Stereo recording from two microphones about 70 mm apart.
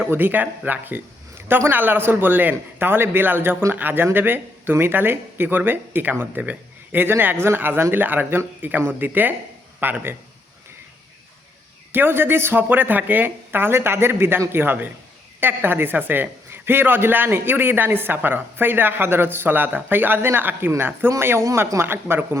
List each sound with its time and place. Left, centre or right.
0.1 s speech: right
11.9 s speech: right